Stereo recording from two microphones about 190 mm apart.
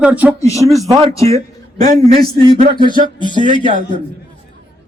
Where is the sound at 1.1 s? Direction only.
15° left (ahead or behind).